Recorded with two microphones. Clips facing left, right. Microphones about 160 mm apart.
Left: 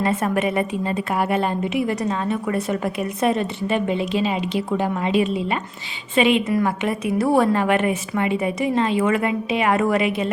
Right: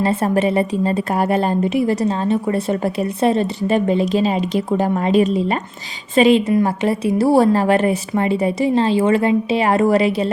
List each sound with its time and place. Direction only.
0.0 s a woman's voice: 35° right (ahead or behind)